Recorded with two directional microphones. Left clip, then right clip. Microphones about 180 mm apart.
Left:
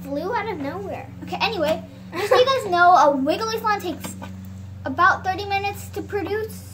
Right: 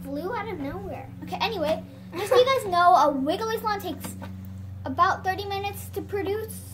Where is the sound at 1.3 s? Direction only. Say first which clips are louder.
Left 4 dB; 15° right (ahead or behind).